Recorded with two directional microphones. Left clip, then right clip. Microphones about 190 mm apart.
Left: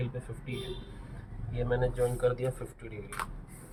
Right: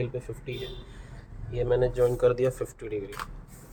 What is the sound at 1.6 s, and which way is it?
Speech, 40° right (ahead or behind).